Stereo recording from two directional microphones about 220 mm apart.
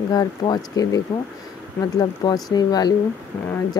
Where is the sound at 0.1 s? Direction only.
15° left (ahead or behind).